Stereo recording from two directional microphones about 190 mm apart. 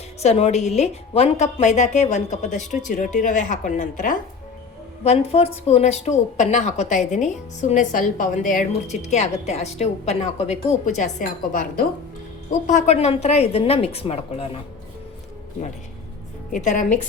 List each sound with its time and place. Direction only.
0.2 s speech: 35° left (ahead or behind)
16.5 s speech: 40° left (ahead or behind)